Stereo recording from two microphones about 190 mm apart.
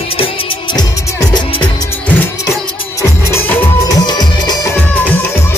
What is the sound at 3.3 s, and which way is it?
Music, 10° left (ahead or behind).